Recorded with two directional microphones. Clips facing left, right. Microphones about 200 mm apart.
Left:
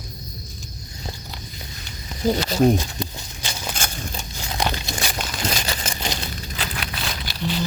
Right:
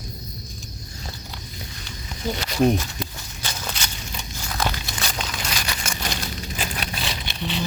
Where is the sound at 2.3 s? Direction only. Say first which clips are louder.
Left 3 dB; 30° left (ahead or behind).